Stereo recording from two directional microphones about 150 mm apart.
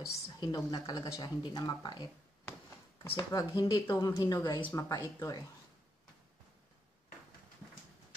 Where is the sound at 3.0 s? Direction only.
25° left (ahead or behind).